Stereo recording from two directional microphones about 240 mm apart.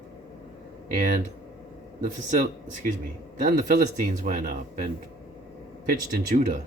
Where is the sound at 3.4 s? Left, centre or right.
Right.